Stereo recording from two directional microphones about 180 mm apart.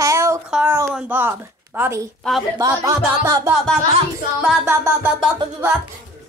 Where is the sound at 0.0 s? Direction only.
15° right (ahead or behind).